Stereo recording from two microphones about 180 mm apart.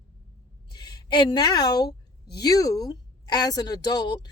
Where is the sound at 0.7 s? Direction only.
20° left (ahead or behind).